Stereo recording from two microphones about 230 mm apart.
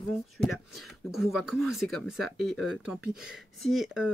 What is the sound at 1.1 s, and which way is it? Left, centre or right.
Speech, centre.